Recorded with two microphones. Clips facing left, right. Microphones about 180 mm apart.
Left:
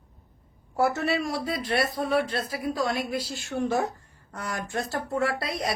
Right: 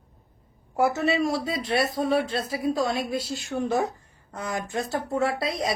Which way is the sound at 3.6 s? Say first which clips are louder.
Even; 20° right (ahead or behind).